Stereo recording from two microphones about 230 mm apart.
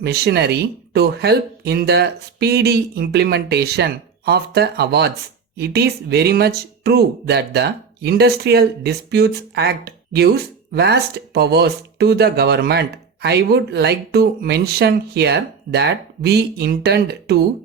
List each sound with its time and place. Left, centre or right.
0.0 s speech: right